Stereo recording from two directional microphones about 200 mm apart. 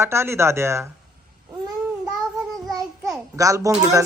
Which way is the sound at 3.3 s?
15° right (ahead or behind).